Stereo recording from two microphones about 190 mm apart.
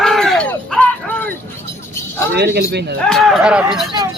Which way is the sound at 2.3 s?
60° right (ahead or behind).